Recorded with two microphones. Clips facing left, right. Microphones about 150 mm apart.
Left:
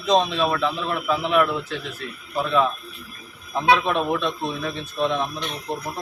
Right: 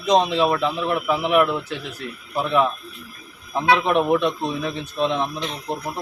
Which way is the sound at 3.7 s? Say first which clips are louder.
Right 4 dB; 20° right (ahead or behind).